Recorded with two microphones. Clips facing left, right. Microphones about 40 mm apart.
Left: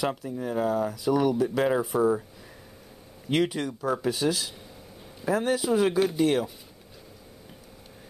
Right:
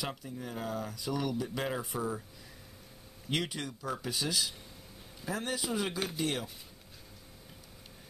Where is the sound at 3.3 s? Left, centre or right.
Left.